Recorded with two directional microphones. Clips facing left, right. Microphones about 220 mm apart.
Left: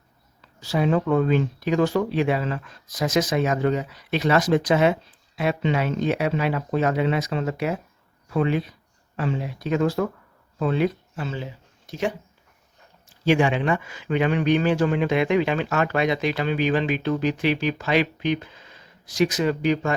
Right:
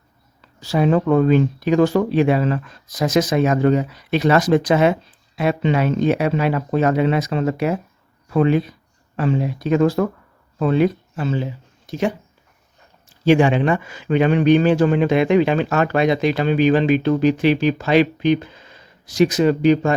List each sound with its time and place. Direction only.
0.7 s speech: 45° right (ahead or behind)
13.2 s speech: 35° right (ahead or behind)